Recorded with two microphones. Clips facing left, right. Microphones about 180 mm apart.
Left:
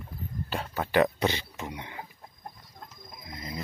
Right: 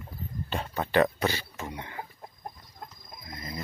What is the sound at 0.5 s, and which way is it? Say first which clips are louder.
Speech: right 1 dB; 5° left (ahead or behind).